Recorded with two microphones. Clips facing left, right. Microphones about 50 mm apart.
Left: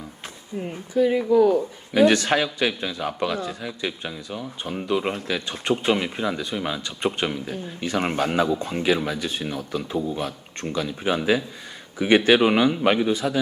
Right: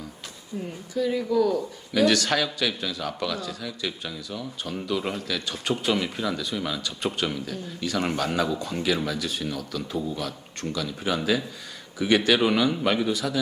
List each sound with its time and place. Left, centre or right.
0.6 s speech: left